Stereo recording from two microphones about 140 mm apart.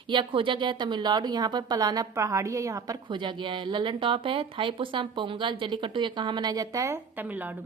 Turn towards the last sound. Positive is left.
turn(degrees=-10)  # may be behind; listen again after turning